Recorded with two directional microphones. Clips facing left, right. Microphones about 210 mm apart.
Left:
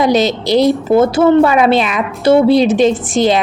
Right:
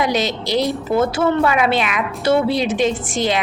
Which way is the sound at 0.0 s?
35° left (ahead or behind).